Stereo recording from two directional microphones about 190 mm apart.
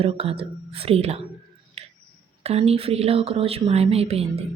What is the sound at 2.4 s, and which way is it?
Speech, 35° right (ahead or behind).